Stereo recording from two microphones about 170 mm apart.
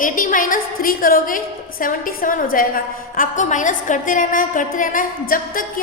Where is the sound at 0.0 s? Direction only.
50° left (ahead or behind).